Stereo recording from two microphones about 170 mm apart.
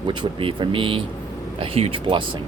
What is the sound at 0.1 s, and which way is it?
Speech, 30° right (ahead or behind).